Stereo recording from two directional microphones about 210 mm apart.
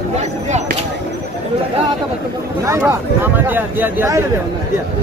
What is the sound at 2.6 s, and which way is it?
Speech, 15° right (ahead or behind).